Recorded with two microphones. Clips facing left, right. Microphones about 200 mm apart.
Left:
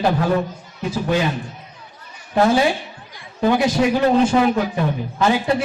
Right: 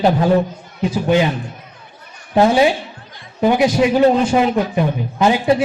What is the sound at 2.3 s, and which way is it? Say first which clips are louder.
Speech: right 3 dB; 20° right (ahead or behind).